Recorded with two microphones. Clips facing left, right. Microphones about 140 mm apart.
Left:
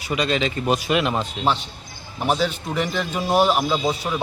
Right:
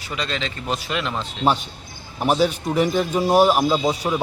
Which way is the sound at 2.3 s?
10° right (ahead or behind).